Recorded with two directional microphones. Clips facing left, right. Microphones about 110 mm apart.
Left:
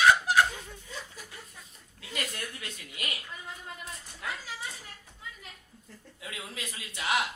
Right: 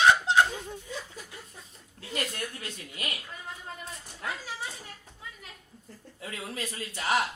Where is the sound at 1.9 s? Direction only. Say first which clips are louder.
Right 3 dB; 35° right (ahead or behind).